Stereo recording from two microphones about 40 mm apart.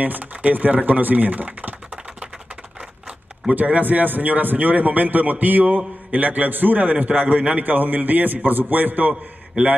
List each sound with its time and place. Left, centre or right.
0.0 s a man's voice: right
3.4 s a man's voice: right